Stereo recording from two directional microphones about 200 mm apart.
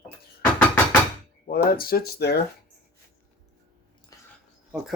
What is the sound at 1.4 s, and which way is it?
Speech, 45° left (ahead or behind).